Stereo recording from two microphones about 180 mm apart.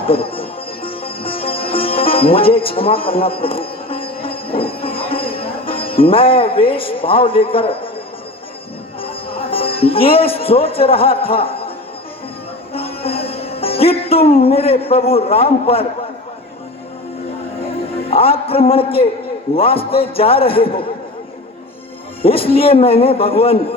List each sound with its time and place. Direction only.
0.0 s music: 30° left (ahead or behind)
9.0 s speech: 30° left (ahead or behind)
12.7 s music: 30° left (ahead or behind)
18.1 s music: 30° left (ahead or behind)
19.5 s a man's voice: 30° left (ahead or behind)
22.2 s a man's voice: 30° left (ahead or behind)